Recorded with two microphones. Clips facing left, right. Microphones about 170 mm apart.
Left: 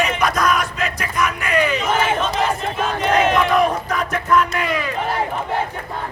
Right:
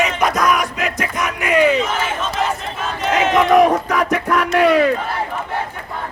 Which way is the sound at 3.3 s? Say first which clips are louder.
Right 4 dB; 80° right.